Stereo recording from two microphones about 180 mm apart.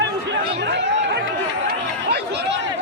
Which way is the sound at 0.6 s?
75° right (ahead or behind).